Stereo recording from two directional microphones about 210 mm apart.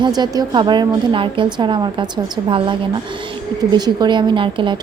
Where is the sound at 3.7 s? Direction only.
20° right (ahead or behind).